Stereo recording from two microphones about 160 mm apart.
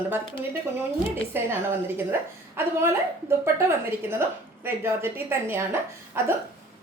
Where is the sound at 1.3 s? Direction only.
15° right (ahead or behind).